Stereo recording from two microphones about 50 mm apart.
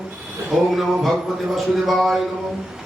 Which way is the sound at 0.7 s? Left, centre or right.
Centre.